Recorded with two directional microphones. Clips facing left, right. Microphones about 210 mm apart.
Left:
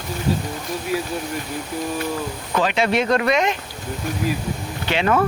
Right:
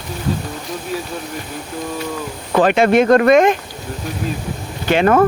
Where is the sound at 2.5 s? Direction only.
50° right (ahead or behind).